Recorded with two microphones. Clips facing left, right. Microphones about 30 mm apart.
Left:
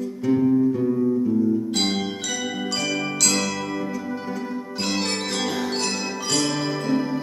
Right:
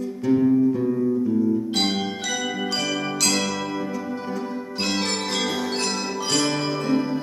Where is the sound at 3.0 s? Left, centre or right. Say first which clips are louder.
Even; centre.